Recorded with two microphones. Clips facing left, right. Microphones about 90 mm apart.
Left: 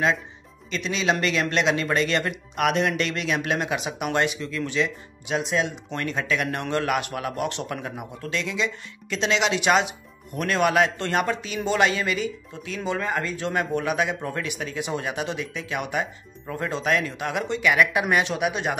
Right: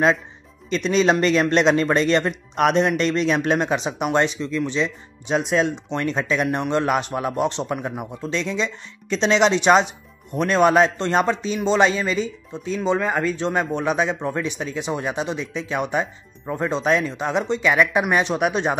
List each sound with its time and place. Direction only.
0.7 s speech: 40° right (ahead or behind); by 4.9 s 25° right (ahead or behind)
6.1 s speech: 25° right (ahead or behind)